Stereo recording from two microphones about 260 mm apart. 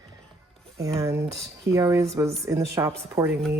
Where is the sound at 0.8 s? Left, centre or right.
Centre.